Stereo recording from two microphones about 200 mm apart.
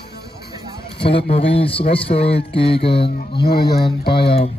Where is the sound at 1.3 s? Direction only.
30° left (ahead or behind).